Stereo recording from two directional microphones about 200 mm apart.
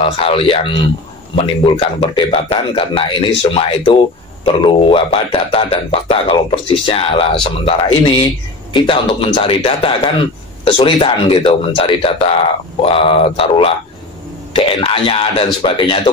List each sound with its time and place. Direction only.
0.0 s speech: 30° left (ahead or behind)